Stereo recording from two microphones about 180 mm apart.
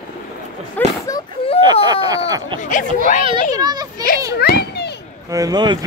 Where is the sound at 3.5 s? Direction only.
20° right (ahead or behind).